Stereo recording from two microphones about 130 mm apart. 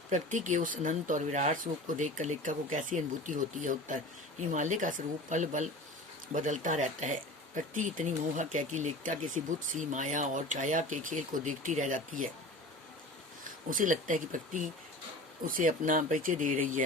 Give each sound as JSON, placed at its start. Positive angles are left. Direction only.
{"t": 0.1, "sound": "speech", "side_deg": -75}
{"t": 13.7, "sound": "speech", "side_deg": -90}